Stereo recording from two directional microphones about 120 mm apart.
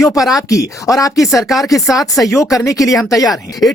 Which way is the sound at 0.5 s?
30° left (ahead or behind).